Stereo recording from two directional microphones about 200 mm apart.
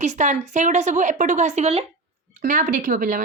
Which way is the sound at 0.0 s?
35° right (ahead or behind).